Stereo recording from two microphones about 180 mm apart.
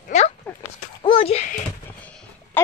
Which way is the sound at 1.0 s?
30° left (ahead or behind).